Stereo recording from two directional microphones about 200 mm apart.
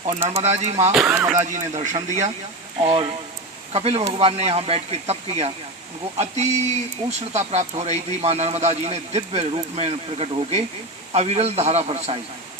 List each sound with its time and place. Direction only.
0.3 s speech: 35° right (ahead or behind)
0.9 s speech: 5° right (ahead or behind)
1.4 s speech: 35° right (ahead or behind)